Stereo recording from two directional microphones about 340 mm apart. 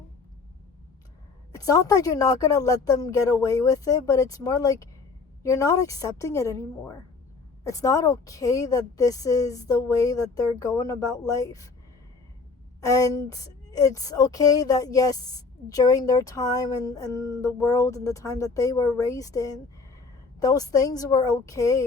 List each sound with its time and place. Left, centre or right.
1.5 s a woman's voice: centre
12.8 s a woman's voice: centre